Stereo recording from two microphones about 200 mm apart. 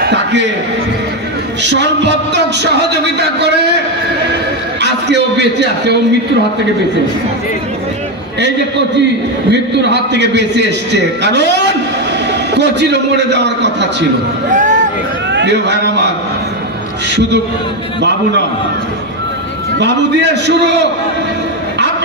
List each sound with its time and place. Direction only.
0.0 s a sound: 60° right (ahead or behind)
1.6 s a man's voice: 60° right (ahead or behind)
4.8 s a man's voice: 60° right (ahead or behind)
9.5 s a man's voice: 60° right (ahead or behind)
14.5 s a sound: 40° right (ahead or behind)
15.3 s a man's voice: 60° right (ahead or behind)
19.8 s a man's voice: 60° right (ahead or behind)